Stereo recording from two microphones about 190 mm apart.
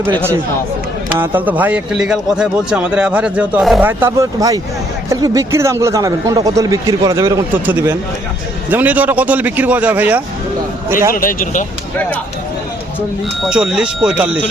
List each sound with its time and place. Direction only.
1.2 s a man's voice: 10° right (ahead or behind)
11.1 s speech: 45° left (ahead or behind)
13.4 s speech: 5° right (ahead or behind)